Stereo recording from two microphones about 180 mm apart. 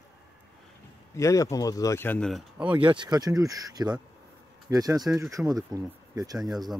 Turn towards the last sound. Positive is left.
turn(degrees=0)  # may be behind; listen again after turning